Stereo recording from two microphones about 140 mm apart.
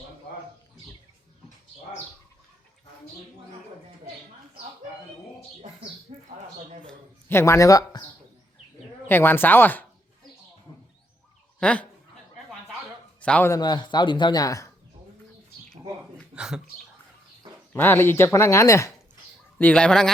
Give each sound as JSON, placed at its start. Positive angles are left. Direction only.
{"t": 6.1, "sound": "bird", "side_deg": -50}
{"t": 7.3, "sound": "speech", "side_deg": 20}
{"t": 9.0, "sound": "speech", "side_deg": 15}
{"t": 11.6, "sound": "speech", "side_deg": 10}
{"t": 13.2, "sound": "speech", "side_deg": 10}
{"t": 13.5, "sound": "speech", "side_deg": 30}
{"t": 16.3, "sound": "speech", "side_deg": -5}
{"t": 17.7, "sound": "speech", "side_deg": 15}
{"t": 19.5, "sound": "speech", "side_deg": 10}